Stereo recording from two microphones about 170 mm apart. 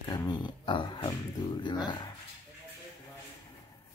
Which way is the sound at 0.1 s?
25° left (ahead or behind).